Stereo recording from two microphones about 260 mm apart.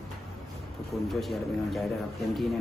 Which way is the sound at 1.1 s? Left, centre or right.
Centre.